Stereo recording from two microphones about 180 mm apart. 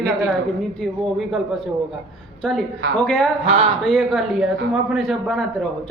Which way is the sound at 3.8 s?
5° left (ahead or behind).